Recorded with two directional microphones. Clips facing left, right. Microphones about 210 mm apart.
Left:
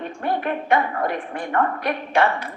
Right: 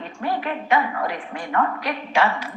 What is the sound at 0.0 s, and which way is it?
A woman's voice, 55° left (ahead or behind).